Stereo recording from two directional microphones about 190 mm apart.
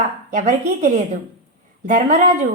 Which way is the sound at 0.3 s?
40° right (ahead or behind).